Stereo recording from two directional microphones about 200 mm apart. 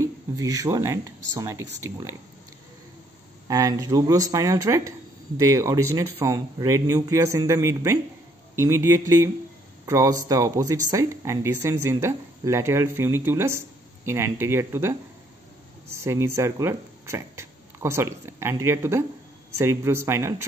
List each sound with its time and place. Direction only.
0.0 s speech: 15° right (ahead or behind)
3.4 s speech: 15° right (ahead or behind)